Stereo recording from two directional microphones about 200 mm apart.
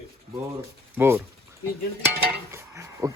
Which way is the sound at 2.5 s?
15° right (ahead or behind).